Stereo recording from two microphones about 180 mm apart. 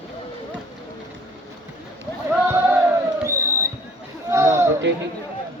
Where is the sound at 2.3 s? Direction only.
10° right (ahead or behind).